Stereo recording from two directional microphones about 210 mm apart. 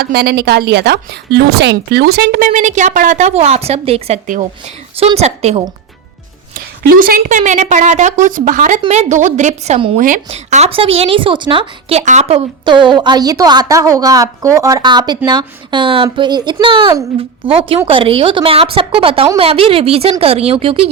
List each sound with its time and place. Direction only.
0.0 s a woman's voice: 50° right (ahead or behind); by 5.6 s 30° right (ahead or behind)
6.8 s a woman's voice: 45° right (ahead or behind); by 20.9 s 25° right (ahead or behind)